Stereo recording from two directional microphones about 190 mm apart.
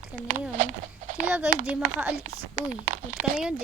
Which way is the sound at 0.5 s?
40° right (ahead or behind).